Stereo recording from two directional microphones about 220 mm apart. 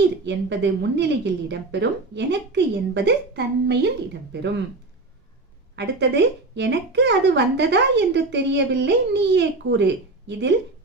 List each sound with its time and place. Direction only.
0.3 s speech: 50° right (ahead or behind)
5.7 s speech: 50° right (ahead or behind)